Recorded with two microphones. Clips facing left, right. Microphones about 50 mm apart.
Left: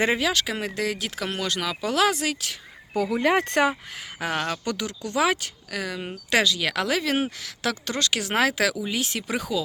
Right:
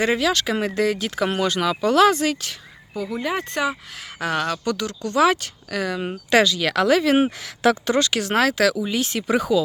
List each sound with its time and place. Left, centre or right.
0.0 s speech: centre
1.2 s speech: centre
2.9 s speech: left
4.2 s speech: centre
7.2 s speech: right
7.9 s speech: centre